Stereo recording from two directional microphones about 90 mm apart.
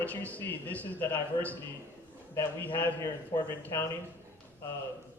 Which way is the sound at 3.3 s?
45° left (ahead or behind).